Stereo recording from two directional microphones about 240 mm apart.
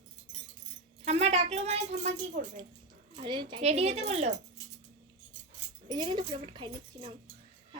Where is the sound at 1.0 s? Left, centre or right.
Right.